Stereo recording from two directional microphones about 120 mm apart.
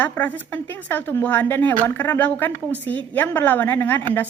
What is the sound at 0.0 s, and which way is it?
Speech, 15° left (ahead or behind).